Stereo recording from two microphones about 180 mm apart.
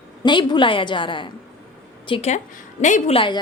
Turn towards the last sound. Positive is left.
turn(degrees=25)  # may be behind; listen again after turning